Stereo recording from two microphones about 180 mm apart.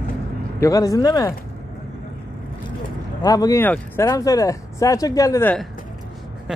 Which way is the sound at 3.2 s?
20° left (ahead or behind).